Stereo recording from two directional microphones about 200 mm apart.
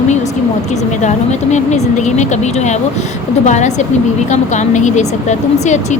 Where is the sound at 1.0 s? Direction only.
35° left (ahead or behind).